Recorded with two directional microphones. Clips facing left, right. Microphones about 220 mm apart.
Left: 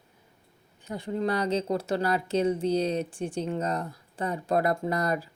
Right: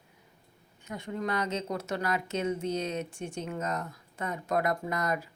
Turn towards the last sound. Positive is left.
turn(degrees=35)  # may be behind; listen again after turning